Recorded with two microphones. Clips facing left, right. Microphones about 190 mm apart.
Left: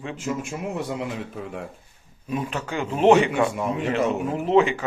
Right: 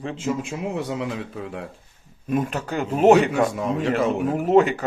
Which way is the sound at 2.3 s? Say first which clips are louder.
Right 4 dB; 45° right (ahead or behind).